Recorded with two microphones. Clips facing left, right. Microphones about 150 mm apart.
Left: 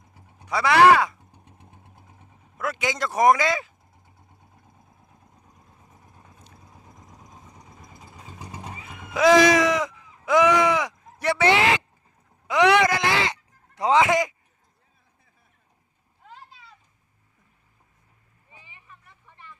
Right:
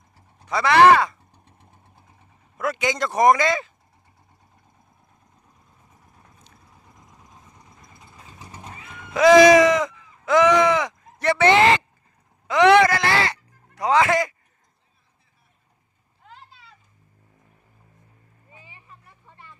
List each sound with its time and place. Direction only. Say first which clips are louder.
0.1 s vehicle: right 1 dB; 20° left (ahead or behind)
2.6 s speech: right 3 dB; 5° left (ahead or behind)
6.1 s vehicle: left 2 dB; centre (ahead or behind)
6.7 s vehicle: left 4 dB; 20° left (ahead or behind)
7.8 s vehicle: left 2 dB; centre (ahead or behind)
8.9 s a sound: right 3 dB; 5° left (ahead or behind)
12.5 s music: right 4 dB; 10° left (ahead or behind)
18.7 s vehicle: right 2 dB; 30° right (ahead or behind)